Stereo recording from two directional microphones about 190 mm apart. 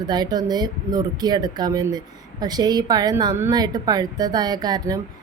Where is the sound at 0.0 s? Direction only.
20° right (ahead or behind).